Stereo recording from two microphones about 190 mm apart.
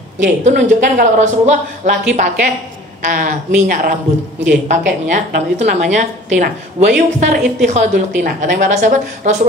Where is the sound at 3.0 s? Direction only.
45° right (ahead or behind).